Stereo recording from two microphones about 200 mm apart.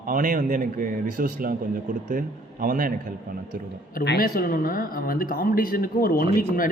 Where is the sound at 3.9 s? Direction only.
50° left (ahead or behind).